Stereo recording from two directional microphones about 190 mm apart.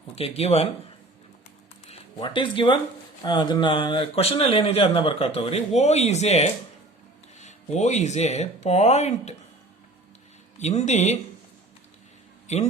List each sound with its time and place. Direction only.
0.2 s speech: 30° left (ahead or behind)
1.9 s speech: 25° left (ahead or behind)
10.6 s speech: 35° left (ahead or behind)
12.5 s speech: 35° left (ahead or behind)